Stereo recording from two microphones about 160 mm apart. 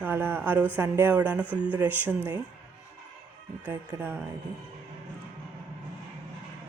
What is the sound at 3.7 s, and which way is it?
Speech, 15° right (ahead or behind).